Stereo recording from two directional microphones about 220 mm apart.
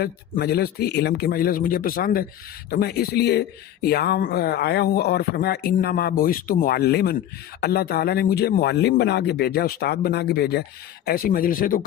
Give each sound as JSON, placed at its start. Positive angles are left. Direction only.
{"t": 0.0, "sound": "speech", "side_deg": 45}